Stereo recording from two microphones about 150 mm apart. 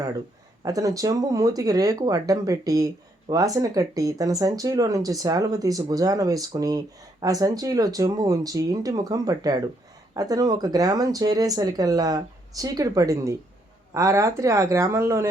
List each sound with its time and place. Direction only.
0.6 s speech: 25° right (ahead or behind)